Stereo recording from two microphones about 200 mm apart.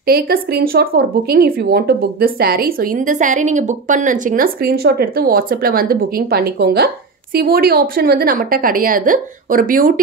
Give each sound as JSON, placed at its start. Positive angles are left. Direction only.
{"t": 0.0, "sound": "speech", "side_deg": -50}